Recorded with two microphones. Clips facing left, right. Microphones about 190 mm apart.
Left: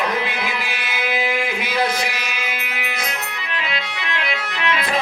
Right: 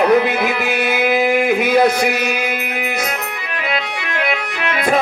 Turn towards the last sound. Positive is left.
turn(degrees=-50)  # may be behind; listen again after turning